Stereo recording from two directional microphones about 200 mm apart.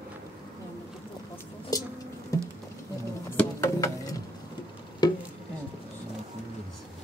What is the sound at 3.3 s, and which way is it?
Music, 15° left (ahead or behind).